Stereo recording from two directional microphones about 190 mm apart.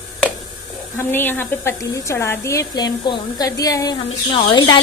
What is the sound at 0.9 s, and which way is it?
A woman's voice, 10° left (ahead or behind).